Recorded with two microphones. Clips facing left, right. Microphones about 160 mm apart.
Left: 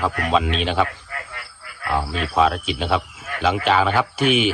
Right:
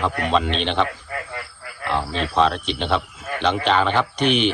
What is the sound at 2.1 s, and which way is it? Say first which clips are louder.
A man's voice: even; 5° left (ahead or behind).